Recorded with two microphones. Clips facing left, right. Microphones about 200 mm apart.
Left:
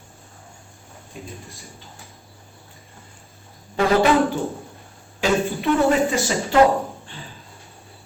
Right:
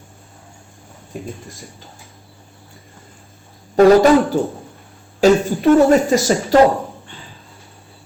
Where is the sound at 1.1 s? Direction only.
50° right (ahead or behind).